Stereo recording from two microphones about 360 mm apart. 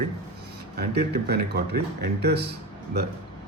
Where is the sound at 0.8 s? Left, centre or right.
Right.